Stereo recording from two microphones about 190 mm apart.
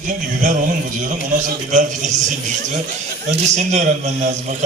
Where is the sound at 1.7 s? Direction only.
40° right (ahead or behind).